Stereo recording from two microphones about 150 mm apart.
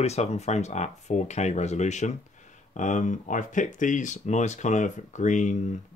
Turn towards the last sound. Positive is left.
turn(degrees=55)  # may be behind; listen again after turning